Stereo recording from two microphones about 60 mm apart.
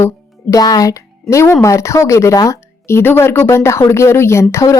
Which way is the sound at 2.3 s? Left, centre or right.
Left.